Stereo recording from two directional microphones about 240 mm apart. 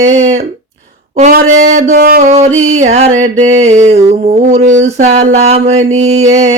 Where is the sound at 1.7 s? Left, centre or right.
Right.